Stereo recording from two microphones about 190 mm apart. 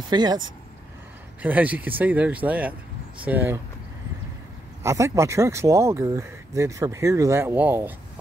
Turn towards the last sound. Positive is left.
turn(degrees=-10)  # may be behind; listen again after turning